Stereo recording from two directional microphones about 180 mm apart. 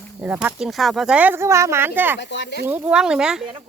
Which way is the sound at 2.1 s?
75° left (ahead or behind).